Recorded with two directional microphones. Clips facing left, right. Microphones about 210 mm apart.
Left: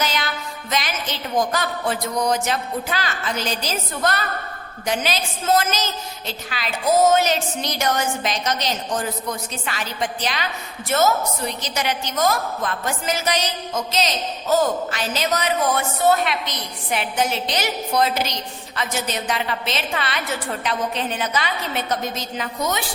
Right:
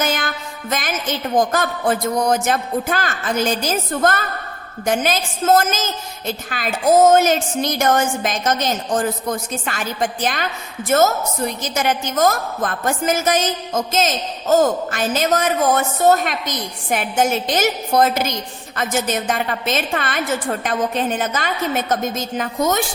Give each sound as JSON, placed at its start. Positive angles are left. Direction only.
{"t": 0.0, "sound": "a woman's voice", "side_deg": -50}